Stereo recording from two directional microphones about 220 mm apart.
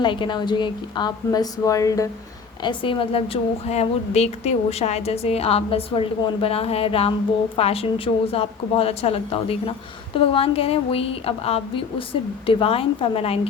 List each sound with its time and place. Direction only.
0.0 s a woman's voice: 20° left (ahead or behind)